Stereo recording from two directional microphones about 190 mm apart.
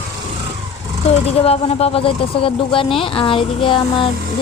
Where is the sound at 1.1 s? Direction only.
30° left (ahead or behind).